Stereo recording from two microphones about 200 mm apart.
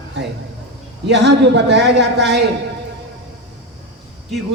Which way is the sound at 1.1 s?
60° right (ahead or behind).